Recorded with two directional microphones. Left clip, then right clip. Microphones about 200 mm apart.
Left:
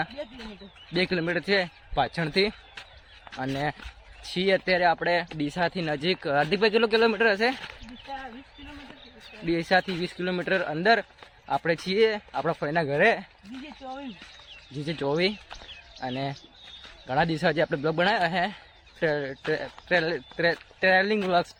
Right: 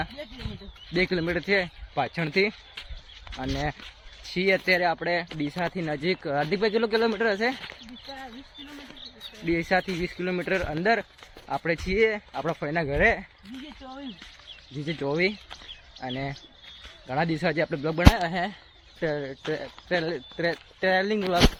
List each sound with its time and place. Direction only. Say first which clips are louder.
0.9 s speech: even; centre (ahead or behind)
9.5 s speech: left 1 dB; centre (ahead or behind)
13.7 s speech: left 6 dB; 30° left (ahead or behind)
14.9 s speech: even; 10° left (ahead or behind)